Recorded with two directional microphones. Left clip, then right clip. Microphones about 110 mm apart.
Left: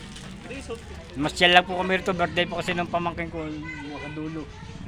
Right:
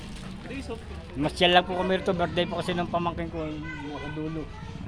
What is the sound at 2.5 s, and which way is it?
Speech, 30° left (ahead or behind).